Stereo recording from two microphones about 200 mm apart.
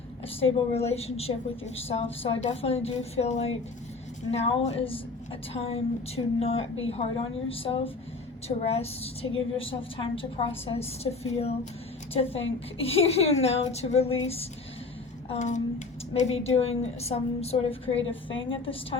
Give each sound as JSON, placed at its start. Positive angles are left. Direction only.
{"t": 0.5, "sound": "a woman's voice", "side_deg": 30}
{"t": 15.3, "sound": "a woman's voice", "side_deg": 35}